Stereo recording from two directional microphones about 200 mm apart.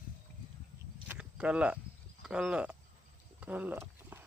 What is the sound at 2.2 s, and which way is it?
Speech, 5° right (ahead or behind).